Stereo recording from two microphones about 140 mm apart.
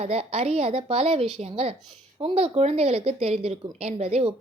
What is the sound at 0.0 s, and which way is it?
A woman's voice, 50° right (ahead or behind).